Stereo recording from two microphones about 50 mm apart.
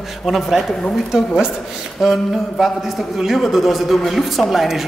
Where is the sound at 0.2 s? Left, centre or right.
Centre.